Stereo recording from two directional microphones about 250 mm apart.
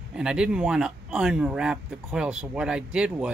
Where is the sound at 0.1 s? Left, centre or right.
Centre.